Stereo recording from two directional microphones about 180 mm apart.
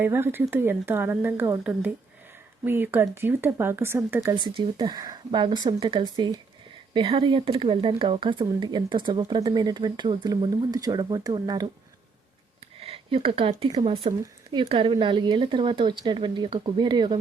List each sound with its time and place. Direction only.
0.0 s speech: 10° right (ahead or behind)
2.6 s speech: 10° right (ahead or behind)
12.8 s speech: 35° right (ahead or behind)